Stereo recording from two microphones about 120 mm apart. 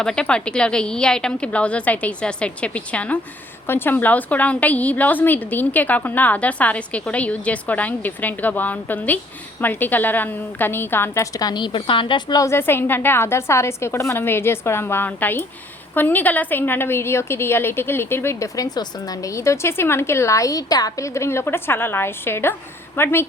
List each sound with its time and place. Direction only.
0.0 s a woman's voice: 5° left (ahead or behind); by 12.5 s 35° left (ahead or behind)
12.5 s a woman's voice: 20° left (ahead or behind)